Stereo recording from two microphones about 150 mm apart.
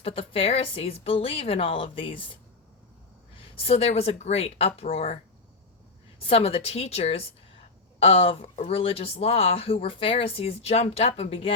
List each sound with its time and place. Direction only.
0.0 s speech: 35° left (ahead or behind)
6.1 s speech: 40° left (ahead or behind)